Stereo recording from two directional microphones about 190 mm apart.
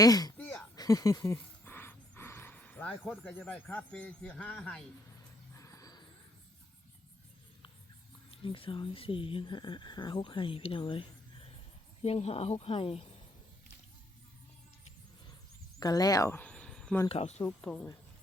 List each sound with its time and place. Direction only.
0.0 s a sound: 20° left (ahead or behind)
3.1 s speech: 10° left (ahead or behind)
5.5 s a sound: 15° left (ahead or behind)
8.3 s speech: 30° left (ahead or behind)
15.8 s speech: 20° left (ahead or behind)
17.1 s speech: 35° left (ahead or behind)